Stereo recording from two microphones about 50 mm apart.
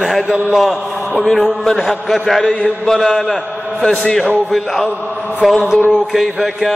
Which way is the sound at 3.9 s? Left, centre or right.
Centre.